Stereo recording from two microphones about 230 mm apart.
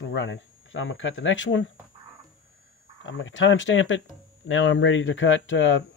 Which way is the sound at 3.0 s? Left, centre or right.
Left.